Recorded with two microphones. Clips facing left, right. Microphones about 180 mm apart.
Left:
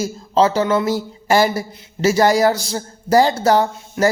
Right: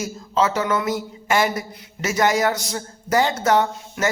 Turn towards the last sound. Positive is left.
turn(degrees=35)  # may be behind; listen again after turning